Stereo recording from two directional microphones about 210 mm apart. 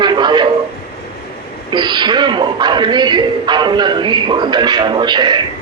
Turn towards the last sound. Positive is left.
turn(degrees=-20)  # may be behind; listen again after turning